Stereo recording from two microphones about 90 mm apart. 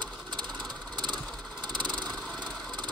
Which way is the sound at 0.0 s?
55° right (ahead or behind).